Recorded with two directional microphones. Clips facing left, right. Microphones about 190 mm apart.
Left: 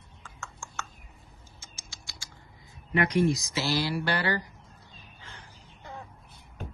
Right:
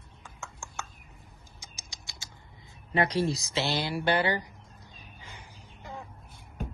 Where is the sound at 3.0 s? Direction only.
30° right (ahead or behind).